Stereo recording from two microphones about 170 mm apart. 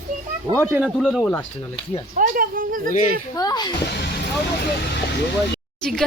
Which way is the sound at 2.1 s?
55° right (ahead or behind).